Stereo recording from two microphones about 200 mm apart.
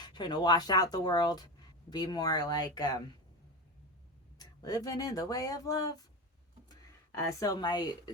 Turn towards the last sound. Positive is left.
turn(degrees=20)  # may be behind; listen again after turning